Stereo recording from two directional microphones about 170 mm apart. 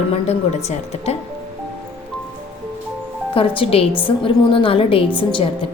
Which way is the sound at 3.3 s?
30° left (ahead or behind).